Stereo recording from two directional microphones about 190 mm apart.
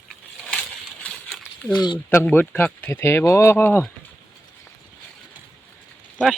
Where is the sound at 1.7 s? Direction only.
25° left (ahead or behind).